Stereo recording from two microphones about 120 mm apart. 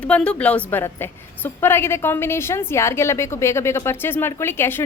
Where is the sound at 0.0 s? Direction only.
10° left (ahead or behind).